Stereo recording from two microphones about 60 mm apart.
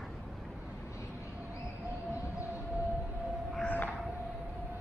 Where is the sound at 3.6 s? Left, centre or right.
Left.